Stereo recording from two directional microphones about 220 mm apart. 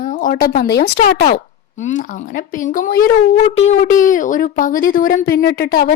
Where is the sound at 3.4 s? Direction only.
30° left (ahead or behind).